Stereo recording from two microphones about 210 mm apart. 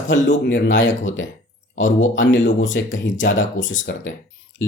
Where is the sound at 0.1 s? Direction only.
60° left (ahead or behind).